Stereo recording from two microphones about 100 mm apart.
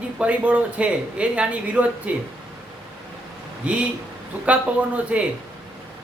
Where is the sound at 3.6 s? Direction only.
10° right (ahead or behind).